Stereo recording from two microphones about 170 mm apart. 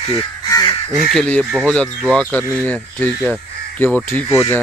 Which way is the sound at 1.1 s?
5° left (ahead or behind).